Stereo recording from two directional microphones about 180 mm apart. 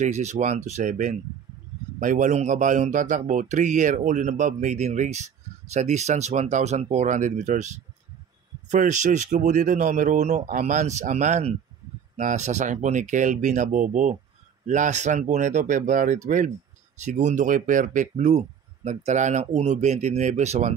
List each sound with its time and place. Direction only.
0.0 s speech: 40° right (ahead or behind)